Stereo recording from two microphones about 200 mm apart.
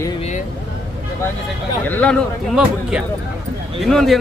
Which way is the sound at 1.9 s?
5° left (ahead or behind).